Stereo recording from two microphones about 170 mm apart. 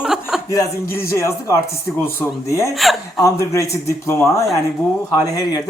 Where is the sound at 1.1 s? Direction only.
15° left (ahead or behind).